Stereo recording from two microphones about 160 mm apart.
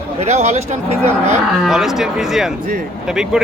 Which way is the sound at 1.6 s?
Centre (ahead or behind).